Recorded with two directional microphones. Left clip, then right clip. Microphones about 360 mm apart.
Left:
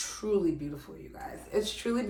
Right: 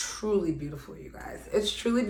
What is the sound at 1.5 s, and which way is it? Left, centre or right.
Speech, centre.